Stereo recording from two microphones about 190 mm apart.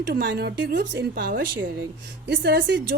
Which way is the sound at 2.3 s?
60° right (ahead or behind).